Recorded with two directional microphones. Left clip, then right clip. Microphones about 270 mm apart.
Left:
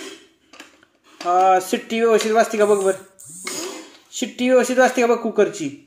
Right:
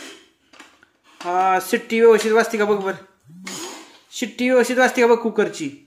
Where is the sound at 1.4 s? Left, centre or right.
Centre.